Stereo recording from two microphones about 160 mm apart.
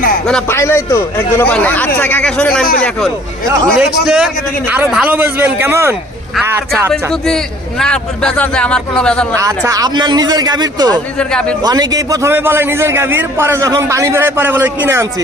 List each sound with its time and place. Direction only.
0.4 s a man's voice: 15° left (ahead or behind)
3.8 s a man's voice: 5° right (ahead or behind)
6.9 s a man's voice: 5° left (ahead or behind)
9.3 s a man's voice: 20° right (ahead or behind)
10.9 s a man's voice: 5° left (ahead or behind)
11.6 s a man's voice: 25° right (ahead or behind)